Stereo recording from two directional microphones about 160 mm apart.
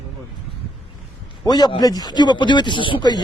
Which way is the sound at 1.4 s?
25° left (ahead or behind).